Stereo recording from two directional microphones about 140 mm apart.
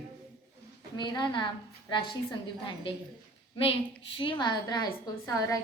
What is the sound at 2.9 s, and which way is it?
Speech, 40° left (ahead or behind).